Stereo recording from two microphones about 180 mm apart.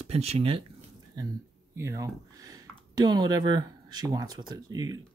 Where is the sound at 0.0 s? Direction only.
35° right (ahead or behind).